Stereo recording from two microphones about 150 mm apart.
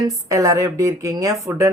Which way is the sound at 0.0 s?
20° right (ahead or behind).